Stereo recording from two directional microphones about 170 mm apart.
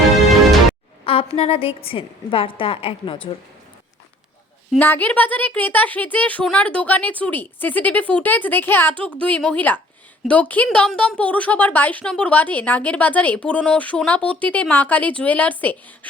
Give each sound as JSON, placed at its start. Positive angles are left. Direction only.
{"t": 1.0, "sound": "a woman's voice", "side_deg": 35}
{"t": 4.8, "sound": "a woman's voice", "side_deg": 10}